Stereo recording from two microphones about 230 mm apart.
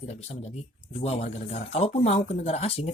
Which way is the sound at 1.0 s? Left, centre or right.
Left.